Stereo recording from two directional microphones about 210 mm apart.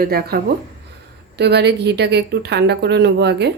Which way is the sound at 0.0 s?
45° right (ahead or behind).